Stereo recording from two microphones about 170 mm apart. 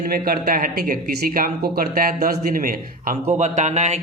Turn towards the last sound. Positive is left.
turn(degrees=-40)  # may be behind; listen again after turning